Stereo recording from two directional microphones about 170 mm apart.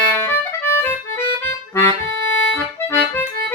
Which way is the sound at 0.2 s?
15° left (ahead or behind).